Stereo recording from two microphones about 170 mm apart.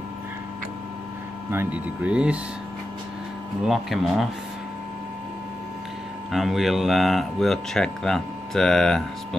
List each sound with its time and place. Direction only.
1.5 s speech: 10° right (ahead or behind)
3.6 s speech: centre (ahead or behind)
6.3 s speech: centre (ahead or behind)